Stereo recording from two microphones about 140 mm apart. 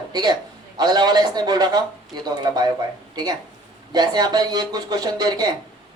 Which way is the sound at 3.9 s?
30° right (ahead or behind).